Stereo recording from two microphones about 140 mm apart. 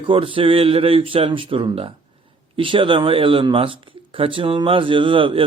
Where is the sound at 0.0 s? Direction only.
40° right (ahead or behind).